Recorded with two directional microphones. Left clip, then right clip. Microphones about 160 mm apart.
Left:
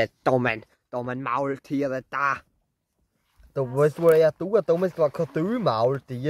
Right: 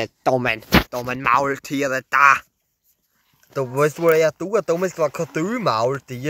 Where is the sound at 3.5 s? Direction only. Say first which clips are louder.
Right 3 dB; 15° right (ahead or behind).